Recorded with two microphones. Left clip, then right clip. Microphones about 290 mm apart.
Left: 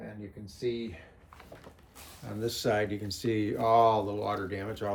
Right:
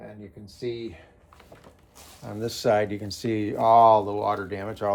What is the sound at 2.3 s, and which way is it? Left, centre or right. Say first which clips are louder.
Speech: right 6 dB; right.